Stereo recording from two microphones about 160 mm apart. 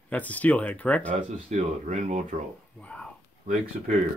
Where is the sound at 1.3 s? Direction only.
45° right (ahead or behind).